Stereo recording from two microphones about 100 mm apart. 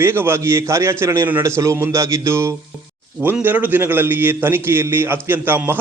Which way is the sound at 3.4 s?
20° right (ahead or behind).